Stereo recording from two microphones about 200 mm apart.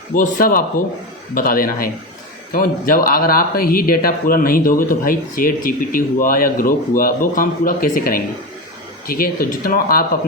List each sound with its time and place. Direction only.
0.1 s speech: 45° left (ahead or behind)